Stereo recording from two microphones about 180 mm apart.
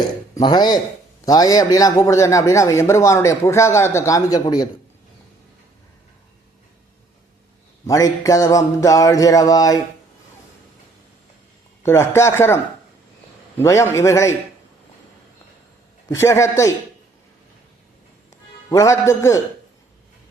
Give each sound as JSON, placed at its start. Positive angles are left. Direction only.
{"t": 0.3, "sound": "a sound", "side_deg": 25}
{"t": 1.2, "sound": "a man's voice", "side_deg": 20}
{"t": 7.9, "sound": "a sound", "side_deg": 20}
{"t": 11.8, "sound": "a man's voice", "side_deg": 15}
{"t": 13.6, "sound": "a man's voice", "side_deg": 15}
{"t": 16.0, "sound": "a man's voice", "side_deg": 15}
{"t": 18.7, "sound": "a man's voice", "side_deg": 20}